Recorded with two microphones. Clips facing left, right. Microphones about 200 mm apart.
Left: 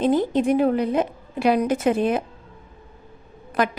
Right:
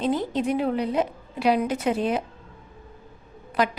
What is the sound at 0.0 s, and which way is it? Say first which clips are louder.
A woman's voice: left 5 dB; 50° left (ahead or behind).